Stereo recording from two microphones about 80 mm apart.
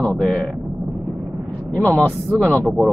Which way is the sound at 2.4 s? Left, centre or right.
Right.